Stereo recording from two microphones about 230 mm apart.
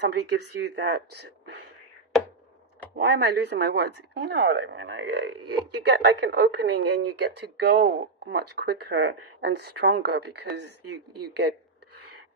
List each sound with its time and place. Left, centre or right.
0.0 s speech: right
2.9 s speech: right